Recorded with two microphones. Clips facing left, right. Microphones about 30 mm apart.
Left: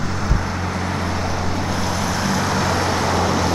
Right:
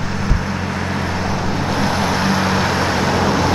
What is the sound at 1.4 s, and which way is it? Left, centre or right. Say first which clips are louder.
Vehicle: right 4 dB; right.